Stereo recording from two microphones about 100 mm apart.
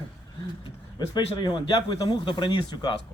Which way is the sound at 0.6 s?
50° left (ahead or behind).